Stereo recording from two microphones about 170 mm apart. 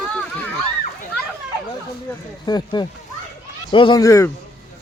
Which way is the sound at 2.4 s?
25° left (ahead or behind).